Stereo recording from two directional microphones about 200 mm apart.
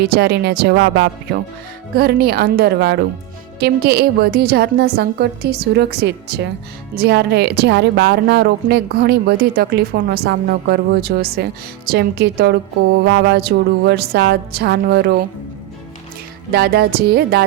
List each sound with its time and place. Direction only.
0.0 s a woman's voice: 55° right (ahead or behind)
16.5 s a woman's voice: 50° right (ahead or behind)